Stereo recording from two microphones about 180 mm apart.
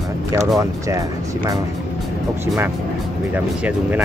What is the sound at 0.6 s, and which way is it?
Speech, 20° right (ahead or behind).